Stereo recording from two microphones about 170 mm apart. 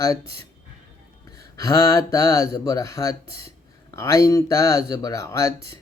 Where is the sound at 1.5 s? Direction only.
20° left (ahead or behind).